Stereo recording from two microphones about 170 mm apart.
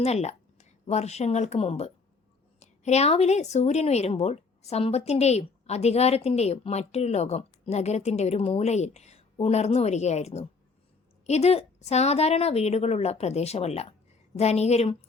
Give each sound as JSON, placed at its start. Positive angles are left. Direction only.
{"t": 0.0, "sound": "a woman's voice", "side_deg": 40}